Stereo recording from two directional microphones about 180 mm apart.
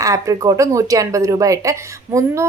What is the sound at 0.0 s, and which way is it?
Speech, 20° right (ahead or behind).